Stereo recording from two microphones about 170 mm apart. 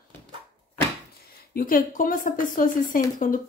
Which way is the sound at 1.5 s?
55° left (ahead or behind).